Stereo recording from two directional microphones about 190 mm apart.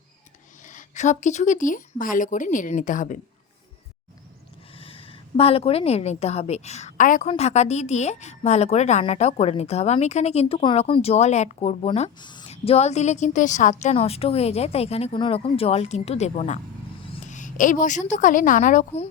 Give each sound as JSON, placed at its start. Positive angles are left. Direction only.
{"t": 0.6, "sound": "speech", "side_deg": 40}
{"t": 4.7, "sound": "a woman's voice", "side_deg": 30}